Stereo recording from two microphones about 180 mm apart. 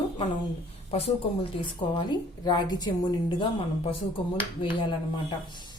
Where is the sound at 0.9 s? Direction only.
35° left (ahead or behind).